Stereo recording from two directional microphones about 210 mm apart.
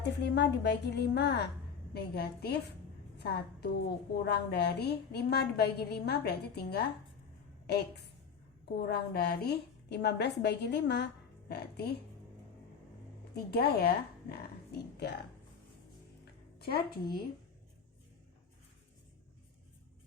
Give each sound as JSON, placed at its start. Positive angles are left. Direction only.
{"t": 0.0, "sound": "a woman's voice", "side_deg": 55}
{"t": 13.3, "sound": "speech", "side_deg": 50}
{"t": 16.2, "sound": "music", "side_deg": 50}